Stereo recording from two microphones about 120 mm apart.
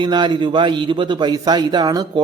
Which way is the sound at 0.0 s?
40° right (ahead or behind).